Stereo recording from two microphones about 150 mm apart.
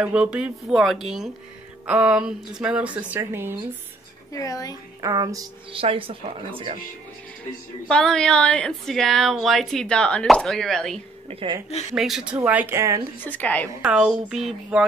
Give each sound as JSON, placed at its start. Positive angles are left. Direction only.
{"t": 0.1, "sound": "a woman's voice", "side_deg": -5}
{"t": 4.3, "sound": "a woman's voice", "side_deg": 20}
{"t": 5.0, "sound": "speech", "side_deg": -25}
{"t": 5.7, "sound": "speech", "side_deg": -35}
{"t": 7.9, "sound": "a woman's voice", "side_deg": 5}
{"t": 11.2, "sound": "speech", "side_deg": -40}
{"t": 11.9, "sound": "a woman's voice", "side_deg": 0}
{"t": 13.2, "sound": "a woman's voice", "side_deg": 10}
{"t": 13.8, "sound": "a woman's voice", "side_deg": -5}